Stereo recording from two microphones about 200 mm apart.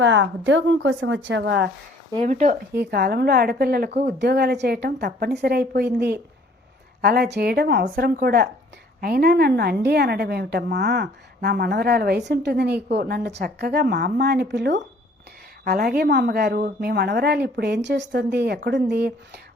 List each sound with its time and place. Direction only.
0.0 s a woman's voice: 65° right (ahead or behind)
2.1 s speech: 40° right (ahead or behind)
2.7 s a woman's voice: 55° right (ahead or behind)